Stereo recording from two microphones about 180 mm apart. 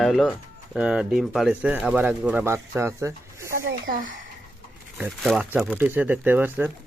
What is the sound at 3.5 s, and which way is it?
Speech, 50° right (ahead or behind).